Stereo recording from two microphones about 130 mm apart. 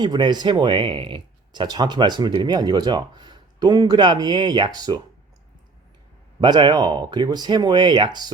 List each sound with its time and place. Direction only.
0.0 s speech: 35° right (ahead or behind)
6.4 s speech: 35° right (ahead or behind)